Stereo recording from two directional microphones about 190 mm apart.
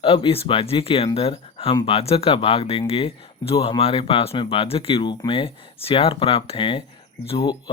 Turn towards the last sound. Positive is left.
turn(degrees=30)  # may be behind; listen again after turning